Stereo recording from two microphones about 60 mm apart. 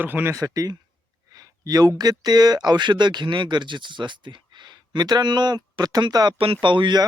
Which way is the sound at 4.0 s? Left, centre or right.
Right.